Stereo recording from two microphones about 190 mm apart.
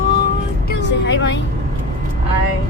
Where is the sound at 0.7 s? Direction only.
65° left (ahead or behind).